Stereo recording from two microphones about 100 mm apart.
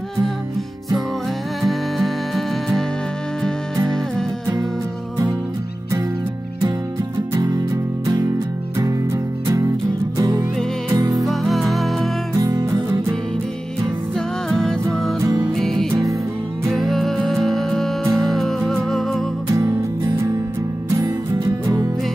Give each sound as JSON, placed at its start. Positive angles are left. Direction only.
{"t": 1.6, "sound": "music", "side_deg": 0}
{"t": 7.3, "sound": "music", "side_deg": -35}
{"t": 11.2, "sound": "music", "side_deg": 0}
{"t": 12.4, "sound": "music", "side_deg": -35}
{"t": 14.1, "sound": "music", "side_deg": 5}